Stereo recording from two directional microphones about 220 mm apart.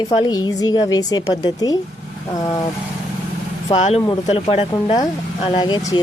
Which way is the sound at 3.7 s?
30° left (ahead or behind).